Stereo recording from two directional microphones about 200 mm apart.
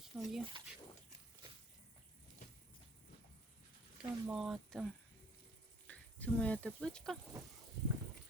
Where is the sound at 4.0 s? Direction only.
5° right (ahead or behind).